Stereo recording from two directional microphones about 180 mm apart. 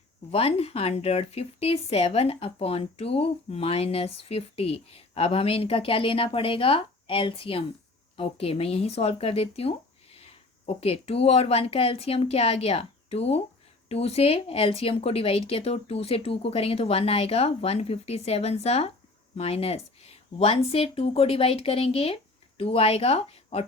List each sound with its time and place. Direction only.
0.3 s speech: 35° left (ahead or behind)